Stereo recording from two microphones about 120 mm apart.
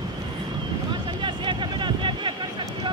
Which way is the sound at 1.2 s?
40° right (ahead or behind).